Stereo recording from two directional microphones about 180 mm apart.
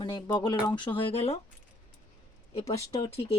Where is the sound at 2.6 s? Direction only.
20° left (ahead or behind).